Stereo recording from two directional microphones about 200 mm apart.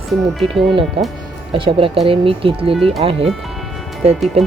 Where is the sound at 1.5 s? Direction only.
25° right (ahead or behind).